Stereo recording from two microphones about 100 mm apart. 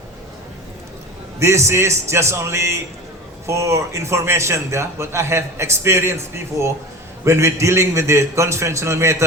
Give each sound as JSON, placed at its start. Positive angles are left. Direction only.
{"t": 1.4, "sound": "a man's voice", "side_deg": -30}